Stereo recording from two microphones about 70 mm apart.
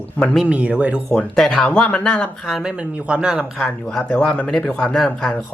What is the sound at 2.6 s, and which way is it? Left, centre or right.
Speech, centre.